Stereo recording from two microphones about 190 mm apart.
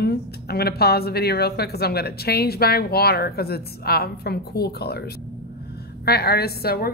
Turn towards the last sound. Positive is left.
turn(degrees=55)  # may be behind; listen again after turning